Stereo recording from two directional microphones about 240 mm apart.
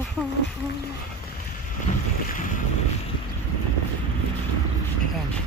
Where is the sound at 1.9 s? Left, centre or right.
Left.